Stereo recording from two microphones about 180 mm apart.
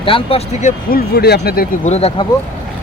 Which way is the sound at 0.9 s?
60° left (ahead or behind).